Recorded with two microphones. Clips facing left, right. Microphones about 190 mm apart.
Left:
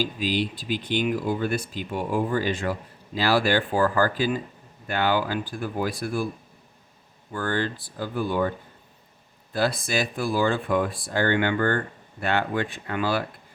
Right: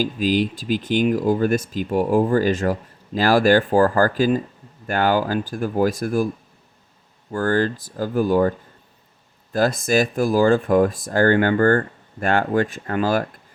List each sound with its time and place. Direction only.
0.0 s speech: 45° right (ahead or behind)
7.3 s speech: 40° right (ahead or behind)